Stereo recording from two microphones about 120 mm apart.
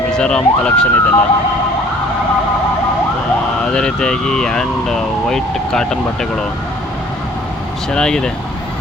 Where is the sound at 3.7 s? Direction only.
5° left (ahead or behind).